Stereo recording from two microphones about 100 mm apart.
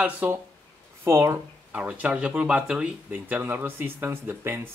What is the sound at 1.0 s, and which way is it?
Speech, 25° right (ahead or behind).